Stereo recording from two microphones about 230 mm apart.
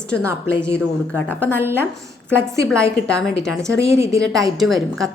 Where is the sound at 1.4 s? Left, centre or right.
Centre.